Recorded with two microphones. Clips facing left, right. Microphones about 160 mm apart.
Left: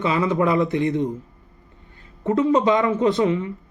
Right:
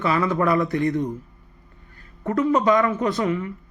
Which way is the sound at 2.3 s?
25° left (ahead or behind).